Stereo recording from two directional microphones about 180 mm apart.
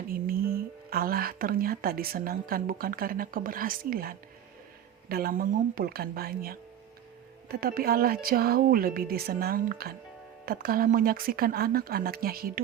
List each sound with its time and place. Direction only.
0.1 s a woman's voice: 55° right (ahead or behind)